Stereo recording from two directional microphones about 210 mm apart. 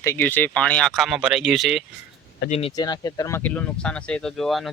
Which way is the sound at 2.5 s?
25° left (ahead or behind).